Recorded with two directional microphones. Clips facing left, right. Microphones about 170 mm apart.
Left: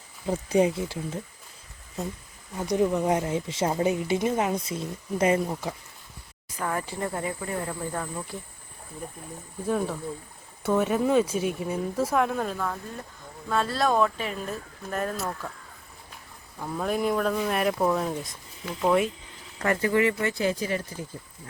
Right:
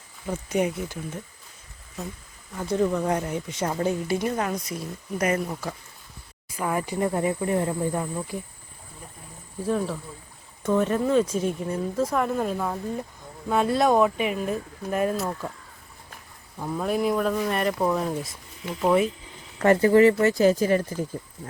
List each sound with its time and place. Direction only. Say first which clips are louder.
0.3 s speech: left 3 dB; 30° left (ahead or behind)
2.6 s speech: even; 15° left (ahead or behind)
6.6 s speech: right 4 dB; 10° right (ahead or behind)
9.6 s speech: right 1 dB; centre (ahead or behind)
12.5 s speech: right 4 dB; 20° right (ahead or behind)
16.6 s speech: right 2 dB; centre (ahead or behind)
19.6 s speech: right 7 dB; 30° right (ahead or behind)